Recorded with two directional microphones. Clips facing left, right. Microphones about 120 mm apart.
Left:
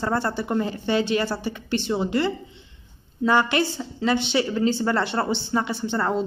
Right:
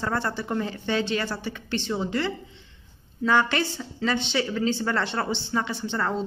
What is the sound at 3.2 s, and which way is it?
Speech, 10° left (ahead or behind).